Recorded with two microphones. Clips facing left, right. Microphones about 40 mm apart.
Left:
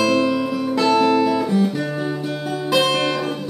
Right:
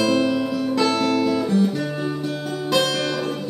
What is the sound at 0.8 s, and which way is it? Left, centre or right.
Guitar, centre.